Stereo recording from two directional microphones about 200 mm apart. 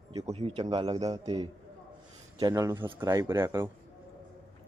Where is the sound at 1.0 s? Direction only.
20° right (ahead or behind).